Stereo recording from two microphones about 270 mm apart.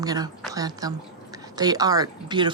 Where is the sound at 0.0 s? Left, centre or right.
Centre.